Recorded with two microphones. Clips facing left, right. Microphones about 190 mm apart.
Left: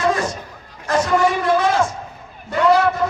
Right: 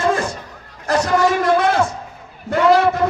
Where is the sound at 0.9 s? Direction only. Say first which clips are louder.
Right 1 dB; 40° right (ahead or behind).